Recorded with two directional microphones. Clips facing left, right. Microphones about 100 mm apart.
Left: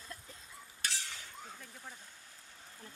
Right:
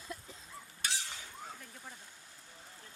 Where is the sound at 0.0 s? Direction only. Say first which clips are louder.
Right 4 dB; 15° right (ahead or behind).